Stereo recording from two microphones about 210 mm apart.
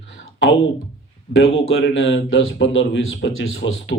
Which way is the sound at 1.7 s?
70° left (ahead or behind).